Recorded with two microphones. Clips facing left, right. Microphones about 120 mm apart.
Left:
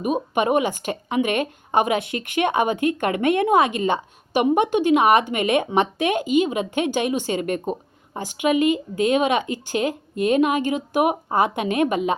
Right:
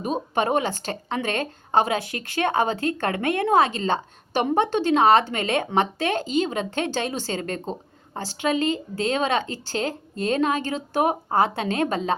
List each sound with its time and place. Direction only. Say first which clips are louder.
0.0 s speech: left 3 dB; 15° left (ahead or behind)